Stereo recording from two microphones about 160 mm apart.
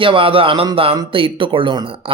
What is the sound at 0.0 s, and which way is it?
Speech, 35° right (ahead or behind).